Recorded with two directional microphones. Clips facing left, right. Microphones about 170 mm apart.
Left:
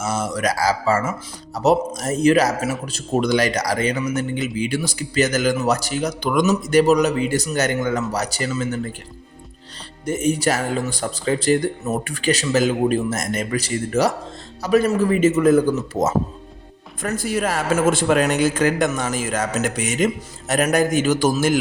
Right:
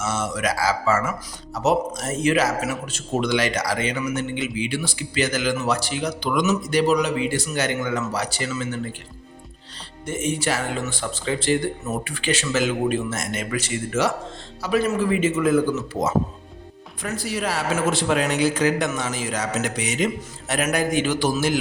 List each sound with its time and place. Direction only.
0.0 s a man's voice: 35° left (ahead or behind)
10.1 s a man's voice: 40° left (ahead or behind)